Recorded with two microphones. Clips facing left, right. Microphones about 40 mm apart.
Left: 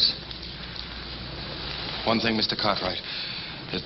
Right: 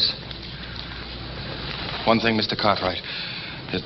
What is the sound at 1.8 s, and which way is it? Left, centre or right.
Rain, centre.